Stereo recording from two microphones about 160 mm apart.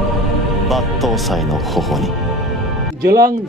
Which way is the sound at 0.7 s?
Centre (ahead or behind).